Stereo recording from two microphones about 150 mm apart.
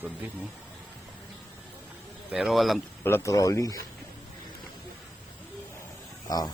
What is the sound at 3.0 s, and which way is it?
Speech, 15° left (ahead or behind).